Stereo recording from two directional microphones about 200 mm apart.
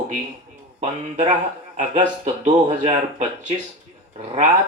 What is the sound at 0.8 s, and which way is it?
Speech, 35° right (ahead or behind).